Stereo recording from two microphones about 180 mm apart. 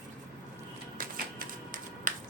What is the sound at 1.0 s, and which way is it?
Typewriter, 50° right (ahead or behind).